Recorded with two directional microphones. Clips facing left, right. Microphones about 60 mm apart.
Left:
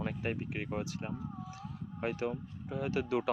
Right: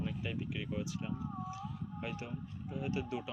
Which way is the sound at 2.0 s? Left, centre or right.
Left.